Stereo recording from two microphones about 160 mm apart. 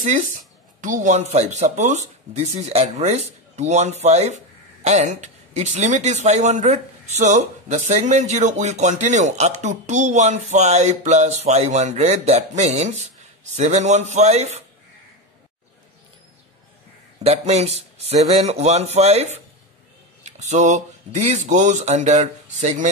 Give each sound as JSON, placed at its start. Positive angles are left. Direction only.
{"t": 0.0, "sound": "speech", "side_deg": -50}
{"t": 17.2, "sound": "speech", "side_deg": -40}